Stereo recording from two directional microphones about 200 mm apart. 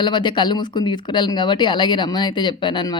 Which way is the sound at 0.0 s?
20° left (ahead or behind).